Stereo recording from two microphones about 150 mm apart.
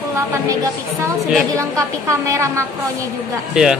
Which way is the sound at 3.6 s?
5° right (ahead or behind).